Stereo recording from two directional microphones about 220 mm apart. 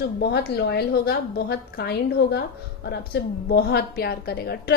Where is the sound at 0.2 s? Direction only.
50° left (ahead or behind).